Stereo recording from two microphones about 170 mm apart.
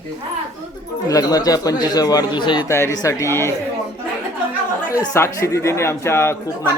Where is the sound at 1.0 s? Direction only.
20° left (ahead or behind).